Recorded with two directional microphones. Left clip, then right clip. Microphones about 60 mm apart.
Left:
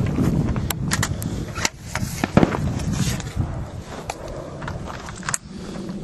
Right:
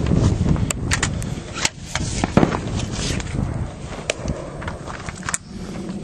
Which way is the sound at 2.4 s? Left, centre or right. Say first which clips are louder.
Even; left.